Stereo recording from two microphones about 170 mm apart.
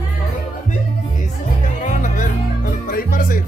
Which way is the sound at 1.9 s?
50° left (ahead or behind).